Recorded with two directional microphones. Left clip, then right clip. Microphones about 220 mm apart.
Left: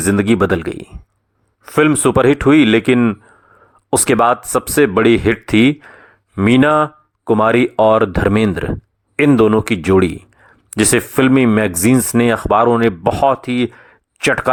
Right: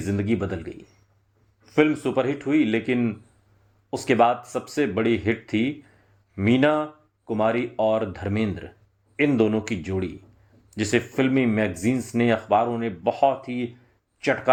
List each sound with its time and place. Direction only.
0.0 s speech: 35° left (ahead or behind)